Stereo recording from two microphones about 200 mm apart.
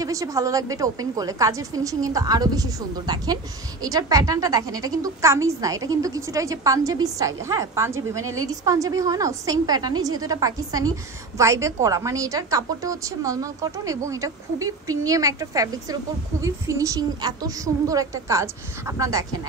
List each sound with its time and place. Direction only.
0.0 s a woman's voice: 15° right (ahead or behind)